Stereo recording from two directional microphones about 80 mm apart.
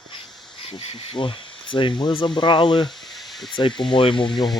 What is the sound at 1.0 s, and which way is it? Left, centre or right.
Speech, left.